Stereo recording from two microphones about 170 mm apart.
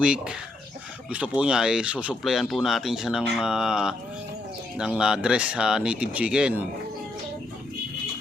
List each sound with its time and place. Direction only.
0.0 s speech: 5° right (ahead or behind)